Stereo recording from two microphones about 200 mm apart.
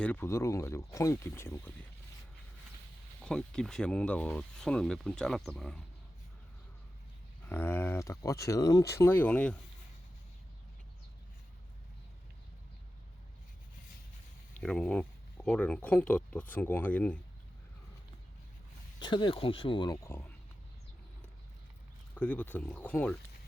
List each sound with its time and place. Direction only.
0.0 s speech: 10° left (ahead or behind)
3.2 s speech: 5° left (ahead or behind)
7.5 s speech: 10° left (ahead or behind)
14.6 s speech: 5° left (ahead or behind)
18.9 s speech: 20° left (ahead or behind)
22.1 s speech: 5° left (ahead or behind)